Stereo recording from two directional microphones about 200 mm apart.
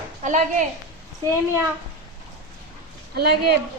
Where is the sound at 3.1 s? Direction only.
55° right (ahead or behind).